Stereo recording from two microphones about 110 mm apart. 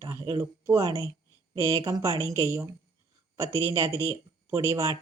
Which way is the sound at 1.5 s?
40° right (ahead or behind).